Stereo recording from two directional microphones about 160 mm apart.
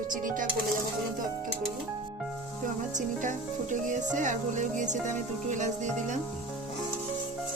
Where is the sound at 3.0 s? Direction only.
50° right (ahead or behind).